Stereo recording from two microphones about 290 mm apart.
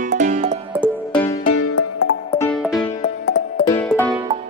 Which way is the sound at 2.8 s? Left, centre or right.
Centre.